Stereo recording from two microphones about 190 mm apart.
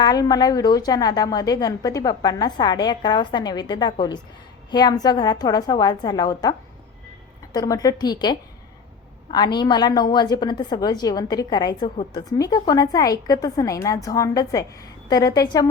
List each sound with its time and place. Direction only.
0.0 s a woman's voice: 20° left (ahead or behind)
7.5 s a woman's voice: 20° left (ahead or behind)